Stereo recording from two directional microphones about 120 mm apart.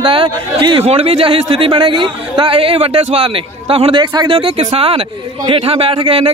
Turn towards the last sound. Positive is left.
turn(degrees=-45)  # may be behind; listen again after turning